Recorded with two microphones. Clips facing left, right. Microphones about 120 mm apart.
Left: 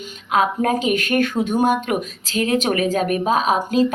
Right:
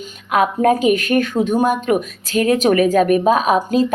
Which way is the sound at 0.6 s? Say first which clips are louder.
Right 5 dB; 40° right (ahead or behind).